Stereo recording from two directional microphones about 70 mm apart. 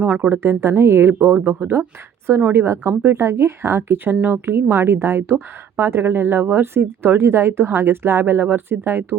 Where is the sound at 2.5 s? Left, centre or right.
Right.